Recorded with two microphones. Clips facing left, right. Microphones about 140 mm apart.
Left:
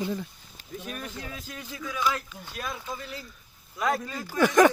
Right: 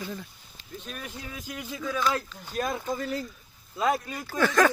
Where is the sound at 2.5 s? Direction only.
45° right (ahead or behind).